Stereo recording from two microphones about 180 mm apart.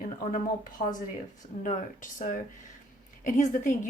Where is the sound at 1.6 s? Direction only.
45° left (ahead or behind).